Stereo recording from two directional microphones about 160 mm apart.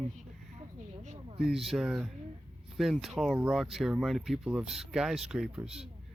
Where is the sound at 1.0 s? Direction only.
45° right (ahead or behind).